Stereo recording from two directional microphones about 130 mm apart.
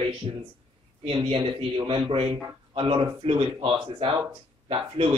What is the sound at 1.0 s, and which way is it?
Speech, 40° right (ahead or behind).